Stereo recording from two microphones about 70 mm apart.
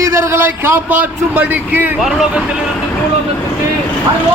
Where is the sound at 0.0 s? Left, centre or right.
Right.